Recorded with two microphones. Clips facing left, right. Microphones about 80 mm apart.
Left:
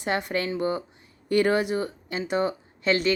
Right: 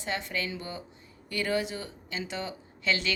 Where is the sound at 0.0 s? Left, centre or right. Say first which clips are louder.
Left 7 dB; left.